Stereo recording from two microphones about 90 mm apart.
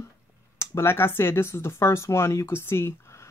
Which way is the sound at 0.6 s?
30° left (ahead or behind).